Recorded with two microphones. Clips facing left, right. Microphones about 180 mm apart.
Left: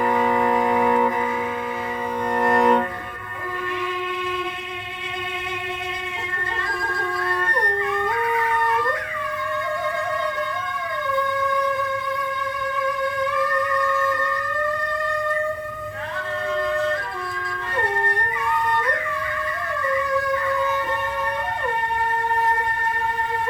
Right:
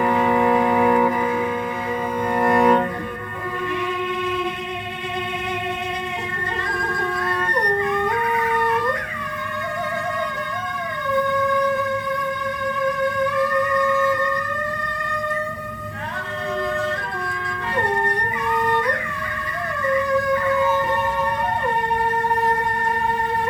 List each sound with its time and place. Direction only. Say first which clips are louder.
0.2 s music: right 2 dB; 5° right (ahead or behind)
2.3 s cello: right 2 dB; 5° right (ahead or behind)